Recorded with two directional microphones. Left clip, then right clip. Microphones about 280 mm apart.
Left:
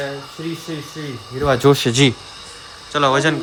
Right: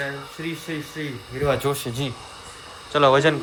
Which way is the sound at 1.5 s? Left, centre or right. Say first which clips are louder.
Left 9 dB; left.